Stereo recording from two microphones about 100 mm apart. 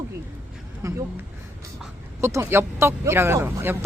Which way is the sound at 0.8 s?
35° right (ahead or behind).